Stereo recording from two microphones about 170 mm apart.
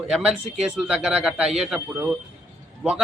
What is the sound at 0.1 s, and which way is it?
A man's voice, 5° right (ahead or behind).